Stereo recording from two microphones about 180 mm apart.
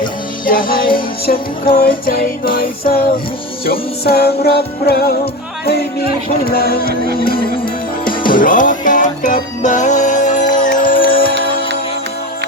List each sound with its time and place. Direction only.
0.4 s music: 50° left (ahead or behind)